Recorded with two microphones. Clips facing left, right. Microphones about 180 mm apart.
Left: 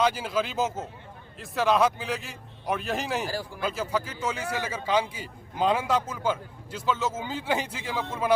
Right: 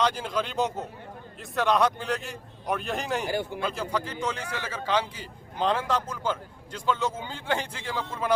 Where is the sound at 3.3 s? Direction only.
25° right (ahead or behind).